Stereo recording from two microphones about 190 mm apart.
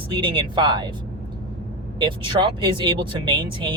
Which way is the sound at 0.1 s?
25° right (ahead or behind).